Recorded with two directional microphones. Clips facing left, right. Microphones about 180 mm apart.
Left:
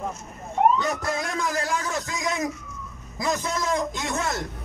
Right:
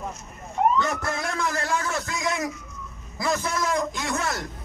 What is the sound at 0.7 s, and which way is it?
A man's voice, 15° left (ahead or behind).